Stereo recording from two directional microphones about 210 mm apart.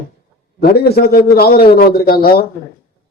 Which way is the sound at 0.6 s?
50° left (ahead or behind).